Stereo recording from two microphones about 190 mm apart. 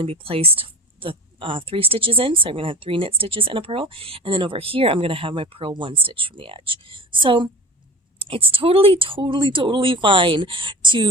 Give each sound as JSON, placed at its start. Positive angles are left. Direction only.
{"t": 0.0, "sound": "speech", "side_deg": -30}